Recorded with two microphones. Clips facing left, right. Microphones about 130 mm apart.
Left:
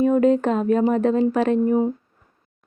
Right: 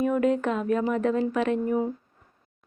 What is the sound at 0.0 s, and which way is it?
Speech, 30° left (ahead or behind).